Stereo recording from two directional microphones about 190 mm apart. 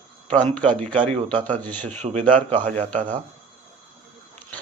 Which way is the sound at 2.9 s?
45° right (ahead or behind).